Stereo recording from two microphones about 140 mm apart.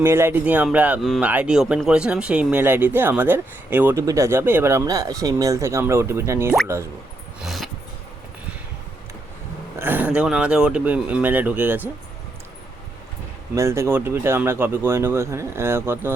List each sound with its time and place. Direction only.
0.0 s speech: 15° right (ahead or behind)
7.4 s vehicle: centre (ahead or behind)
9.7 s speech: 15° right (ahead or behind)
13.6 s speech: 20° right (ahead or behind)